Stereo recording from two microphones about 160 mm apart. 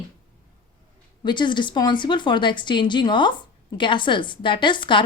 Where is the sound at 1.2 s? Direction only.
30° left (ahead or behind).